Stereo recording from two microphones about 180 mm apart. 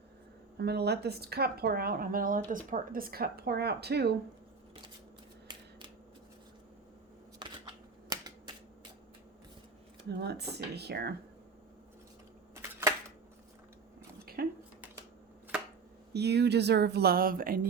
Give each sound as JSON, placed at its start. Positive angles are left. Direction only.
{"t": 0.5, "sound": "speech", "side_deg": -65}
{"t": 5.5, "sound": "a sound", "side_deg": -25}
{"t": 7.4, "sound": "a sound", "side_deg": -25}
{"t": 8.1, "sound": "finger snapping", "side_deg": -20}
{"t": 10.1, "sound": "speech", "side_deg": -65}
{"t": 14.3, "sound": "dishes", "side_deg": -55}
{"t": 16.1, "sound": "speech", "side_deg": -65}